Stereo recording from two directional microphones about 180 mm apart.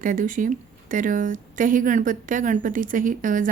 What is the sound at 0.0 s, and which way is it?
A woman's voice, 50° right (ahead or behind).